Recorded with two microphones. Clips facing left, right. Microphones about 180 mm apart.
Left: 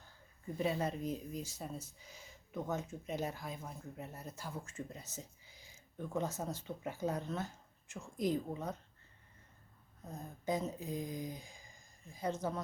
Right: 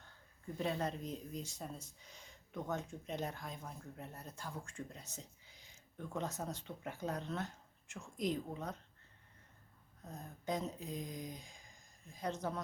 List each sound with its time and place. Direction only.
0.0 s speech: 5° left (ahead or behind)
10.1 s speech: 5° left (ahead or behind)